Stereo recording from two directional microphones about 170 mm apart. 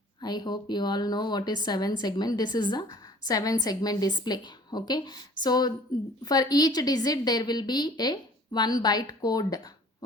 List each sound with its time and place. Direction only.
0.2 s speech: 25° left (ahead or behind)